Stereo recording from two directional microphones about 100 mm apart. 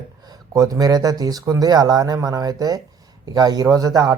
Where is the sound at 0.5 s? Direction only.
35° right (ahead or behind).